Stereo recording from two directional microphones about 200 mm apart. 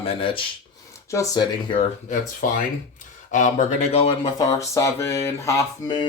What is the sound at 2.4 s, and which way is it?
Speech, 45° left (ahead or behind).